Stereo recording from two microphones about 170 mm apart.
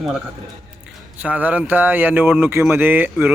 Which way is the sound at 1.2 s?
10° right (ahead or behind).